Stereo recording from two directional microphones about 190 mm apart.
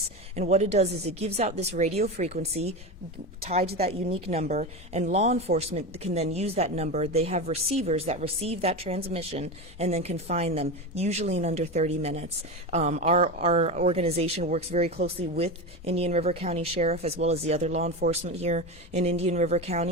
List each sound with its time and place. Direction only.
0.3 s a woman's voice: 35° right (ahead or behind)
3.8 s a woman's voice: 35° right (ahead or behind)